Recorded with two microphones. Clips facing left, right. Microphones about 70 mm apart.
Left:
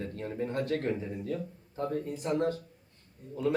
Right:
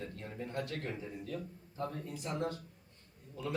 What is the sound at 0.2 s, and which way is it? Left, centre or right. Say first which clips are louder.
Speech: left 8 dB; left.